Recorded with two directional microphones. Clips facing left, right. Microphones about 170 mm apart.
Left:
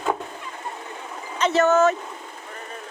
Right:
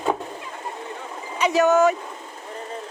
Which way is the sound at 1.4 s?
10° right (ahead or behind).